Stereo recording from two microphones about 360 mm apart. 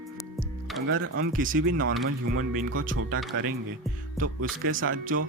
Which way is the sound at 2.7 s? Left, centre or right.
Right.